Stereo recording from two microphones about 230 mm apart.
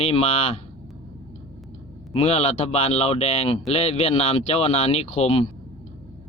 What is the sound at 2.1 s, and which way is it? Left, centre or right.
A man's voice, left.